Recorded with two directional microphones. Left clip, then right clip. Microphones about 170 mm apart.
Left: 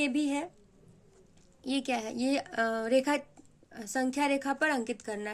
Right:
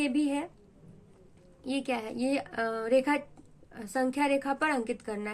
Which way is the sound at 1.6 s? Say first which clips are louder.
Even; 50° left (ahead or behind).